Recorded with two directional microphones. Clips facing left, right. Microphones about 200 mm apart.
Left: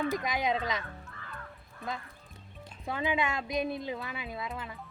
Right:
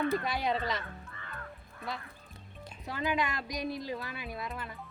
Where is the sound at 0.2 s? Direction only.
90° left.